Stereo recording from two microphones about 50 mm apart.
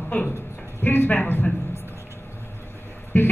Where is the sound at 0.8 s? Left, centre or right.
Left.